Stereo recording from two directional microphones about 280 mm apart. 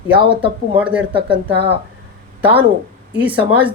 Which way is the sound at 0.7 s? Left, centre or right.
Centre.